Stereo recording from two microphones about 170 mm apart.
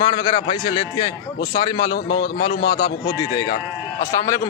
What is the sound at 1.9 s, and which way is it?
A man's voice, 70° left (ahead or behind).